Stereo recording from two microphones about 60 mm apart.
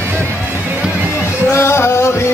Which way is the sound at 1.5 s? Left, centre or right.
Left.